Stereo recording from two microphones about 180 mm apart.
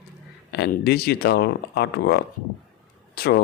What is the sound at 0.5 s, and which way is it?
Speech, 65° left (ahead or behind).